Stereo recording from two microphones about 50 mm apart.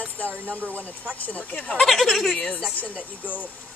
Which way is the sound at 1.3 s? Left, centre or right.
Left.